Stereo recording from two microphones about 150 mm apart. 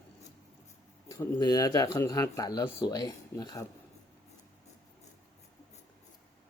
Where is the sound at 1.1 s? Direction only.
25° left (ahead or behind).